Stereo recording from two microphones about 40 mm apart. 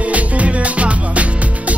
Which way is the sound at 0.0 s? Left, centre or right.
Right.